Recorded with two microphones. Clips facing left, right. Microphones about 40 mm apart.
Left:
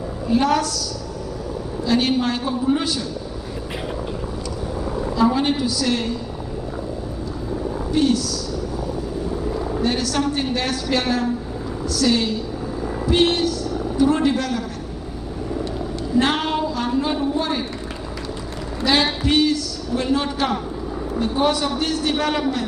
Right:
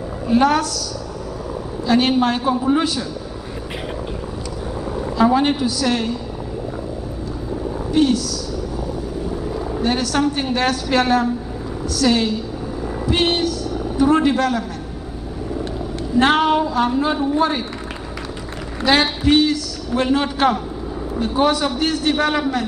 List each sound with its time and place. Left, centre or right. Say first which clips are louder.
0.3 s a man's voice: right 3 dB; right
1.9 s a man's voice: right 3 dB; right
5.1 s a woman's voice: right 3 dB; right
7.9 s a man's voice: right 2 dB; right
9.4 s a sound: even; centre
9.8 s a sound: right 2 dB; right
10.1 s a man's voice: right 3 dB; right
16.2 s a man's voice: right 5 dB; right
18.8 s a man's voice: right 2 dB; right